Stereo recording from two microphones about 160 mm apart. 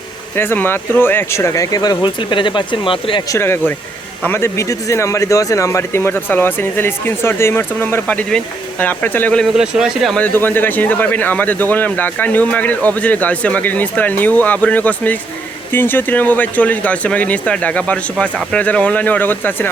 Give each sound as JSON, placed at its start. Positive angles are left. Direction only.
{"t": 0.3, "sound": "speech", "side_deg": 15}
{"t": 3.2, "sound": "speech", "side_deg": 15}
{"t": 9.6, "sound": "speech", "side_deg": -5}